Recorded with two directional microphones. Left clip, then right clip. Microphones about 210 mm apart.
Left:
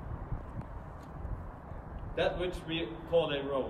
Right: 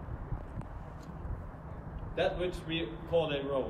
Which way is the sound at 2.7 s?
20° left (ahead or behind).